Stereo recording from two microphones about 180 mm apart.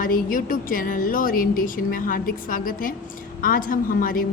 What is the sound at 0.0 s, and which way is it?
A woman's voice, 50° left (ahead or behind).